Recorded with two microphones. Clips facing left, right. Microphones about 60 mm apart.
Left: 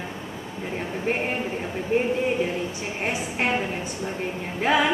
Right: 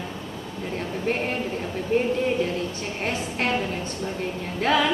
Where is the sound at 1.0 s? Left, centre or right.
Centre.